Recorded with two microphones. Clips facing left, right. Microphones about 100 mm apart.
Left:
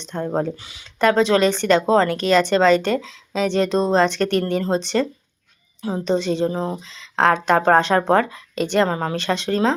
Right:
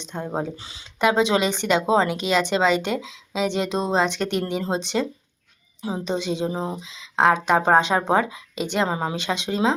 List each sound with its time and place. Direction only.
0.0 s speech: 15° right (ahead or behind)
0.5 s speech: 30° right (ahead or behind)
0.9 s speech: 15° right (ahead or behind)